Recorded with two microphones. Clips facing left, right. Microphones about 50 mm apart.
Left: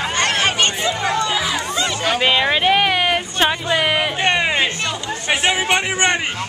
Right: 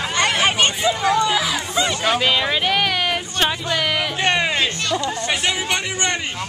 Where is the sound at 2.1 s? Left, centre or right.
Centre.